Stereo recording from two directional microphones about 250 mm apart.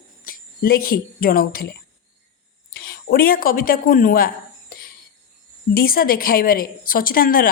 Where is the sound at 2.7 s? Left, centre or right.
Left.